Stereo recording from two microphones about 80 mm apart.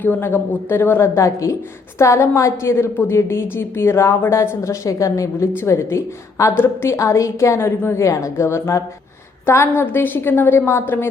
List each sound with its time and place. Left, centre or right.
0.0 s a woman's voice: left